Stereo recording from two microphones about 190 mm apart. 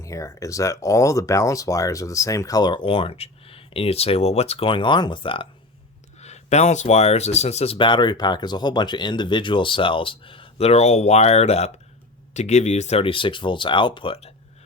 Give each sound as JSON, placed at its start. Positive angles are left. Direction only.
{"t": 0.0, "sound": "speech", "side_deg": 15}